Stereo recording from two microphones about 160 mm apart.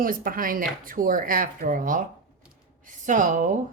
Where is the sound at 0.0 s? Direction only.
60° right (ahead or behind).